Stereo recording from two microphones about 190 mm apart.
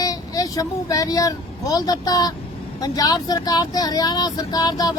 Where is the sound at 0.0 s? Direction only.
20° left (ahead or behind).